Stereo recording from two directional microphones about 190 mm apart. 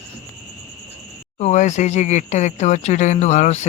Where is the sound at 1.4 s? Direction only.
40° left (ahead or behind).